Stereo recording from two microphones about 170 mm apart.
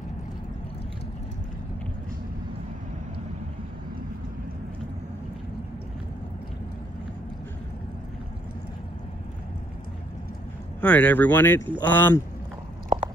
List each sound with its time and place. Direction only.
10.8 s speech: 10° left (ahead or behind)
12.9 s chewing: 35° right (ahead or behind)